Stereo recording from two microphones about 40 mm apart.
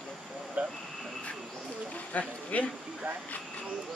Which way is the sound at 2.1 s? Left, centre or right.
Left.